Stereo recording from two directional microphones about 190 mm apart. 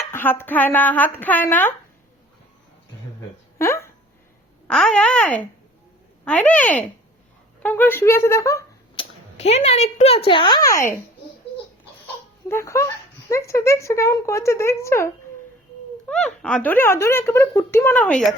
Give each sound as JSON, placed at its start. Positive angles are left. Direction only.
{"t": 0.0, "sound": "speech", "side_deg": 10}
{"t": 3.6, "sound": "a sound", "side_deg": 15}
{"t": 6.2, "sound": "speech", "side_deg": 5}
{"t": 9.0, "sound": "speech", "side_deg": 35}
{"t": 12.5, "sound": "speech", "side_deg": 15}